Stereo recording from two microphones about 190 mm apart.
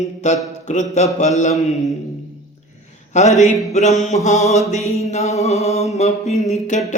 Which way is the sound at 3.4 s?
35° left (ahead or behind).